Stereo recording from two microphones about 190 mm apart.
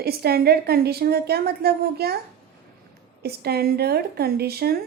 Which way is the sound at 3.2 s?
55° right (ahead or behind).